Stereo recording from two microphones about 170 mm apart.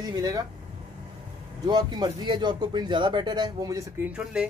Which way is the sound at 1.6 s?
25° right (ahead or behind).